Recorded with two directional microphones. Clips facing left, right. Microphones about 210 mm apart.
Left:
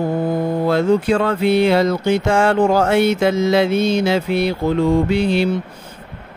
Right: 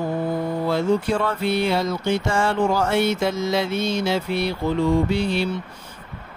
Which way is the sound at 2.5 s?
50° left (ahead or behind).